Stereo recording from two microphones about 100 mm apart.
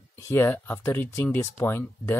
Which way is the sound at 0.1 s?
25° left (ahead or behind).